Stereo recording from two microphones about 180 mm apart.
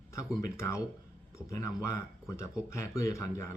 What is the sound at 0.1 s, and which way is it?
Speech, 20° left (ahead or behind).